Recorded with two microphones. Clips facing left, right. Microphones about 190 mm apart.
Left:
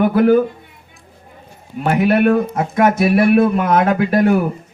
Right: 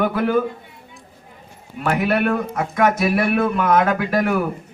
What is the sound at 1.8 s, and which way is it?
Speech, 30° left (ahead or behind).